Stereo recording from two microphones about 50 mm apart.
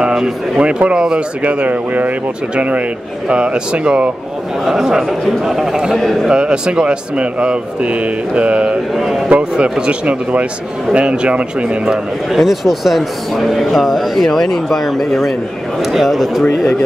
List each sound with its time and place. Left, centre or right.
0.0 s a sound: centre
0.6 s a man's voice: right
4.6 s a man's voice: centre
8.9 s speech: centre
9.4 s a man's voice: centre
12.4 s speech: centre